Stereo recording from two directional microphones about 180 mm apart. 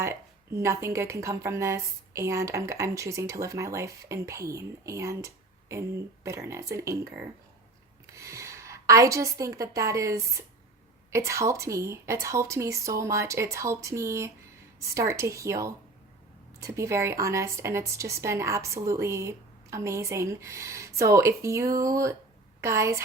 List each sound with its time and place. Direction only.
0.5 s a woman's voice: 15° right (ahead or behind)
8.1 s a woman's voice: 15° right (ahead or behind)